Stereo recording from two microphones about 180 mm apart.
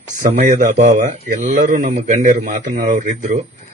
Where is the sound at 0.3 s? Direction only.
45° right (ahead or behind).